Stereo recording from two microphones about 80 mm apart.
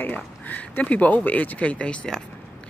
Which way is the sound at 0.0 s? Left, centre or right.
Left.